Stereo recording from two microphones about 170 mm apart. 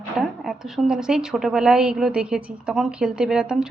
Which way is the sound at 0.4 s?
5° right (ahead or behind).